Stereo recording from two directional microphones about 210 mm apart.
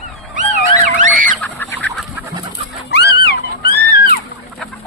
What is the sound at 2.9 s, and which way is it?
Music, 50° left (ahead or behind).